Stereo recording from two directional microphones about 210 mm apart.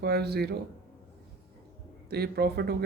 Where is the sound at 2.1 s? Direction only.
50° right (ahead or behind).